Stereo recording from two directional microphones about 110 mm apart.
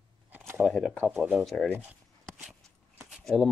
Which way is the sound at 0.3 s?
20° right (ahead or behind).